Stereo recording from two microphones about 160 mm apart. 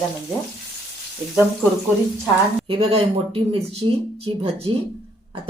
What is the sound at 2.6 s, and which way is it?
Speech, 40° right (ahead or behind).